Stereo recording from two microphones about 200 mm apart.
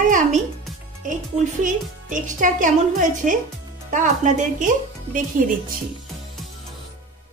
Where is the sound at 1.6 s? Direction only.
40° right (ahead or behind).